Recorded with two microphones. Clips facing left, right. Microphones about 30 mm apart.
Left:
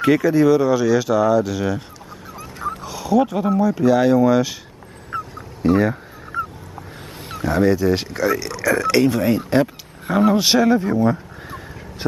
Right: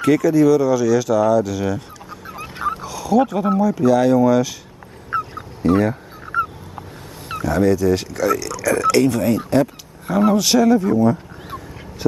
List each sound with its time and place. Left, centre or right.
0.0 s speech: left
2.8 s a sound: centre
3.6 s speech: centre
5.1 s goose: right
5.7 s speech: centre
7.4 s speech: left